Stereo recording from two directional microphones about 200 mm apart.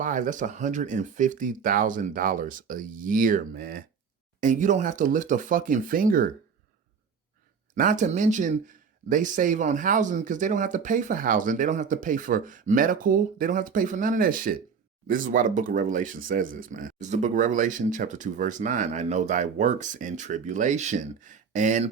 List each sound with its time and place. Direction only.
0.0 s speech: 40° right (ahead or behind)
4.4 s speech: 40° right (ahead or behind)
7.8 s speech: 40° right (ahead or behind)